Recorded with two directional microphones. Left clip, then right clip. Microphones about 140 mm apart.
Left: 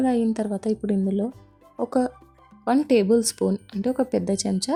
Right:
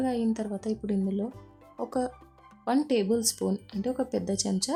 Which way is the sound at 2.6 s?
20° left (ahead or behind).